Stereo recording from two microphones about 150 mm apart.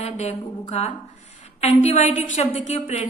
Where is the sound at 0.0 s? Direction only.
45° left (ahead or behind).